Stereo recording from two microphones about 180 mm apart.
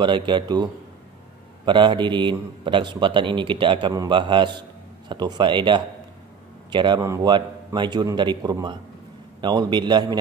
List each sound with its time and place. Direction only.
0.0 s a man's voice: 25° right (ahead or behind)
1.7 s a man's voice: 25° right (ahead or behind)